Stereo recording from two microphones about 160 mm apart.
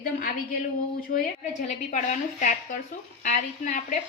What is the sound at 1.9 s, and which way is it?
A woman's voice, 50° left (ahead or behind).